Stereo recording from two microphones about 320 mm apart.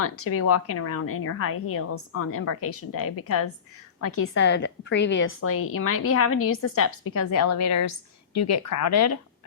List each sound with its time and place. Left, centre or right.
0.0 s a woman's voice: left